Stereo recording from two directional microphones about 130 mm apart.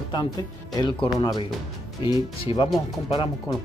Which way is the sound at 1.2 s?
35° left (ahead or behind).